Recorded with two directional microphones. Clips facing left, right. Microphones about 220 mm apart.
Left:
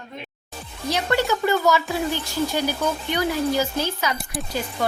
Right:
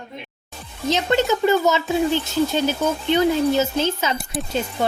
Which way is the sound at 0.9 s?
20° right (ahead or behind).